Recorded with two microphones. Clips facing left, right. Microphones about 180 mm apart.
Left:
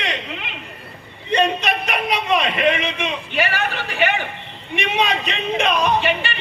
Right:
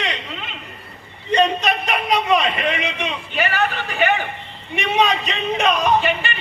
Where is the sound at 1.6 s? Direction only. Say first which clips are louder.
Right 1 dB; 40° right (ahead or behind).